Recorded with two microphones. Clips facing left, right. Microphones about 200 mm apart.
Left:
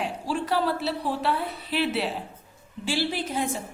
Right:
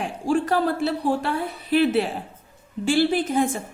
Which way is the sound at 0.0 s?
50° right (ahead or behind).